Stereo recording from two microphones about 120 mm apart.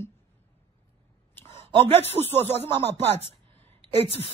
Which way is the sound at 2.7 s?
45° right (ahead or behind).